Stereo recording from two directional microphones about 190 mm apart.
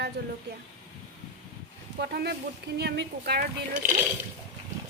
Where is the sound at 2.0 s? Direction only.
60° right (ahead or behind).